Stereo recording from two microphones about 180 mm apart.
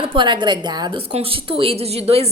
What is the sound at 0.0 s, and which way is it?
A woman's voice, 30° right (ahead or behind).